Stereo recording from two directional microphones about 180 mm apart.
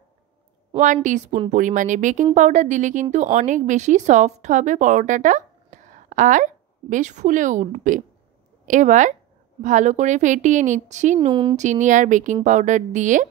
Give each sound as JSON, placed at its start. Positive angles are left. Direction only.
{"t": 0.7, "sound": "a woman's voice", "side_deg": -40}
{"t": 11.2, "sound": "speech", "side_deg": -25}
{"t": 11.5, "sound": "a woman's voice", "side_deg": -40}